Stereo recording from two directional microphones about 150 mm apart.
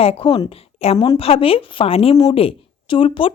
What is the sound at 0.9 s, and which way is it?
Speech, 25° left (ahead or behind).